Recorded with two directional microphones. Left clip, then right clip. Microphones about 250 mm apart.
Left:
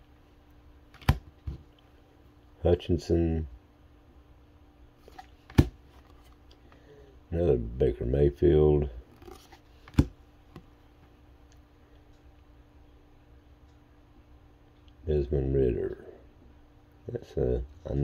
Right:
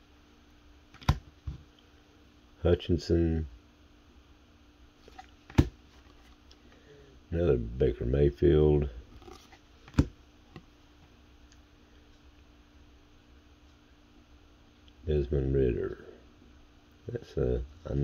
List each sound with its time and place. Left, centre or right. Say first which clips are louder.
2.6 s speech: left 2 dB; centre
7.2 s speech: left 2 dB; centre
15.0 s speech: left 2 dB; centre
17.1 s speech: left 2 dB; centre